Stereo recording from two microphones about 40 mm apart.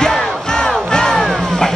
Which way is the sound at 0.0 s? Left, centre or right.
Centre.